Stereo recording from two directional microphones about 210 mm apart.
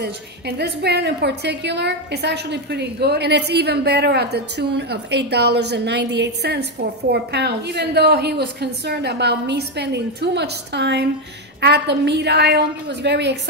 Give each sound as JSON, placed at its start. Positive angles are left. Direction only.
{"t": 0.0, "sound": "a woman's voice", "side_deg": -50}